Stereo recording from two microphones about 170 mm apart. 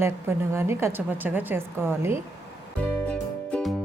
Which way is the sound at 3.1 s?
5° left (ahead or behind).